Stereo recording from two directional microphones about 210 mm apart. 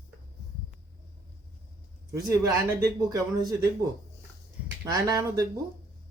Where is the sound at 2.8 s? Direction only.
15° right (ahead or behind).